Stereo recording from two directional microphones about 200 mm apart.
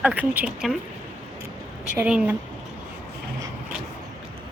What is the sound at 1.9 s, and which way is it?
Speech, 5° right (ahead or behind).